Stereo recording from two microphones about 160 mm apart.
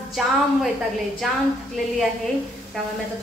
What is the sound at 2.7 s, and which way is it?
Speech, 5° left (ahead or behind).